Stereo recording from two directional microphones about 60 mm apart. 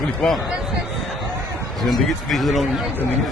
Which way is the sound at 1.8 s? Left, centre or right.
Centre.